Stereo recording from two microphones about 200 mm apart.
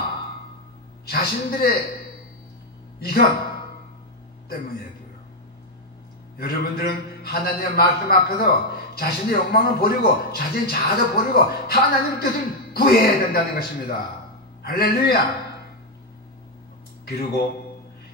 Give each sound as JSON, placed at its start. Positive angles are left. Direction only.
{"t": 1.0, "sound": "a man's voice", "side_deg": 50}
{"t": 3.0, "sound": "a man's voice", "side_deg": 50}
{"t": 6.3, "sound": "a man's voice", "side_deg": 50}
{"t": 17.0, "sound": "speech", "side_deg": 50}